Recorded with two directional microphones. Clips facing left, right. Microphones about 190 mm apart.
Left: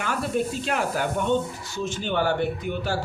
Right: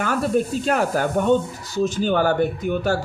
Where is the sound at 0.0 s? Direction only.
45° right (ahead or behind).